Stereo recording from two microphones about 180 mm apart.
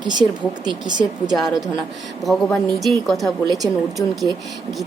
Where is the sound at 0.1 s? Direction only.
25° right (ahead or behind).